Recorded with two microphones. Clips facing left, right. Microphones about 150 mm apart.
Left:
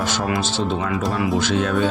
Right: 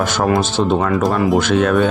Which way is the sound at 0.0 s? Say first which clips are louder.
Right 6 dB; 50° right (ahead or behind).